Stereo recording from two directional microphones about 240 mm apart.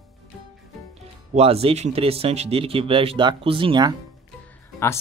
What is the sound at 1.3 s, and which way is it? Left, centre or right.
Speech, right.